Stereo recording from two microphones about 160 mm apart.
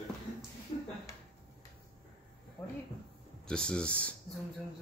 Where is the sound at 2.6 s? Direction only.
15° left (ahead or behind).